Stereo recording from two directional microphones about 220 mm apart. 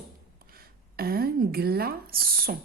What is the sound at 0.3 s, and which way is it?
Speech, 45° right (ahead or behind).